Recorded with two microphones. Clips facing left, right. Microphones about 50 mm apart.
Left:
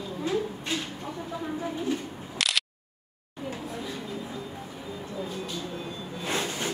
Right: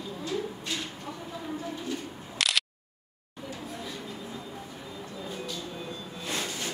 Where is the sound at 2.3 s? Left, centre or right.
Centre.